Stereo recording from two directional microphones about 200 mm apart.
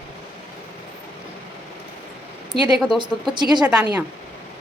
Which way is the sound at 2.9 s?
20° right (ahead or behind).